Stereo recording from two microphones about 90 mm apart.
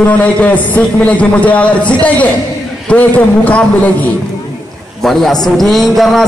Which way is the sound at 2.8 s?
15° left (ahead or behind).